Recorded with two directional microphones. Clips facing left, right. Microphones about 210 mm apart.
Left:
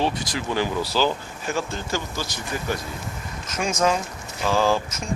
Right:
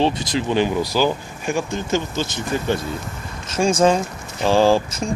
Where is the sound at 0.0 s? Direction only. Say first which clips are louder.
Right 5 dB; 25° right (ahead or behind).